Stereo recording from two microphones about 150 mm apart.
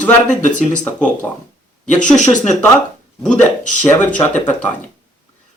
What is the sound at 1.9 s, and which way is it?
Speech, 55° left (ahead or behind).